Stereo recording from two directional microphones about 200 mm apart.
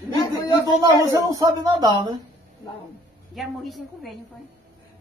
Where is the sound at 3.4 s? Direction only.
Centre (ahead or behind).